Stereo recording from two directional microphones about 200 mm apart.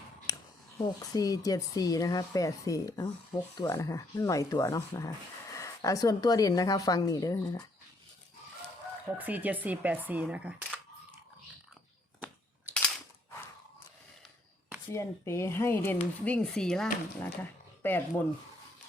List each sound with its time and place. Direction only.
0.3 s a sound: 20° left (ahead or behind)
0.8 s speech: 20° left (ahead or behind)
9.1 s speech: 10° right (ahead or behind)
14.9 s speech: 15° left (ahead or behind)